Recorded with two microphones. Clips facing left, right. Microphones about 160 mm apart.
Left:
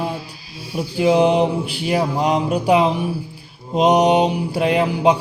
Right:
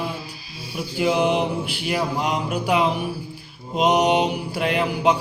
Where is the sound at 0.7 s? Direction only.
30° left (ahead or behind).